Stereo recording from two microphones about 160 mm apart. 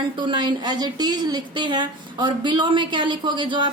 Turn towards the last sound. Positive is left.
turn(degrees=-30)  # may be behind; listen again after turning